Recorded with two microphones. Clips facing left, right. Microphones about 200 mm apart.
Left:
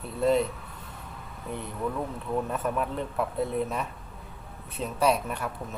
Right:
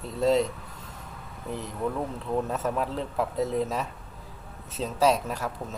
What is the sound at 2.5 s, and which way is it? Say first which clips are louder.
Speech: right 1 dB; 25° right (ahead or behind).